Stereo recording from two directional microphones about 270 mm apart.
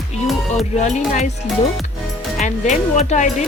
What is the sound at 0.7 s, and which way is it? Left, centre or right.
Speech, left.